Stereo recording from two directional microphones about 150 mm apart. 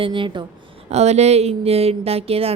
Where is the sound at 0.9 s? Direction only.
45° right (ahead or behind).